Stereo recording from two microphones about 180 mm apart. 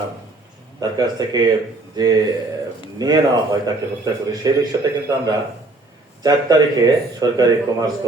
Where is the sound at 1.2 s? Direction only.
20° right (ahead or behind).